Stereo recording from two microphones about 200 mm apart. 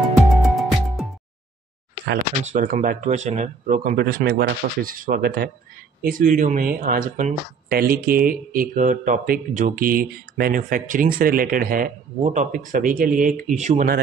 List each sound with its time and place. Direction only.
0.3 s music: centre (ahead or behind)
2.4 s speech: 40° right (ahead or behind)